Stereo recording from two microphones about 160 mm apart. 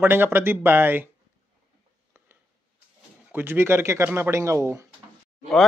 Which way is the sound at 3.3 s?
15° right (ahead or behind).